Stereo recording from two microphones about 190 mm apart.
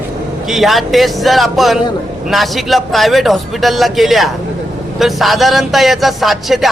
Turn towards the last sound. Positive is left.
turn(degrees=0)  # may be behind; listen again after turning